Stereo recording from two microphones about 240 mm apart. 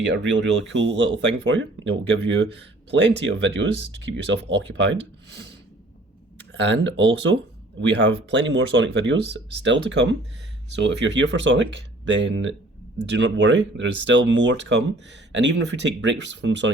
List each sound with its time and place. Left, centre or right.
0.0 s speech: right
6.5 s speech: right